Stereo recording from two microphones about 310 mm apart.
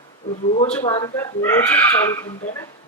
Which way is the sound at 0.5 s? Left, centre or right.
Centre.